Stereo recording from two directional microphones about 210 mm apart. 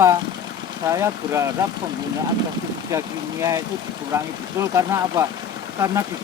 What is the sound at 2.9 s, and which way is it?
Speech, 15° right (ahead or behind).